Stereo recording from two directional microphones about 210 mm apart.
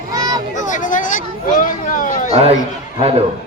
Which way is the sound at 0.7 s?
35° left (ahead or behind).